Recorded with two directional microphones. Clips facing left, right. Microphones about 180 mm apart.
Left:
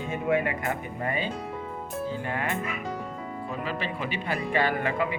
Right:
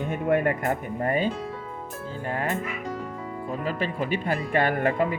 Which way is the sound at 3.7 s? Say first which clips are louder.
Right 7 dB; 45° right (ahead or behind).